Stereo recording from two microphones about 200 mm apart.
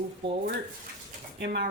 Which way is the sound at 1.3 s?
55° right (ahead or behind).